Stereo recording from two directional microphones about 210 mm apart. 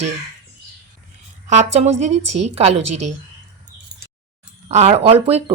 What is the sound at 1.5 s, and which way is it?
A woman's voice, 35° right (ahead or behind).